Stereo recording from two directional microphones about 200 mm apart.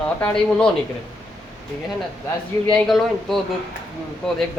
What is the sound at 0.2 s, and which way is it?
Speech, 10° left (ahead or behind).